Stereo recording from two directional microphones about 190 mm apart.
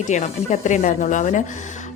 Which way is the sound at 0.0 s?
40° left (ahead or behind).